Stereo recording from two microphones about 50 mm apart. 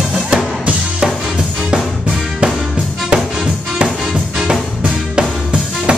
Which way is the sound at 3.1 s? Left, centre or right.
Centre.